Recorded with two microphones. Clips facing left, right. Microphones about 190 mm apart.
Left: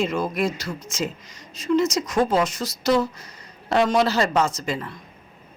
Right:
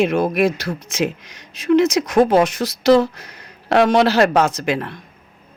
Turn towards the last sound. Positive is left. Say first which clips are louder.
# right 7 dB
turn(degrees=-75)  # may be behind; listen again after turning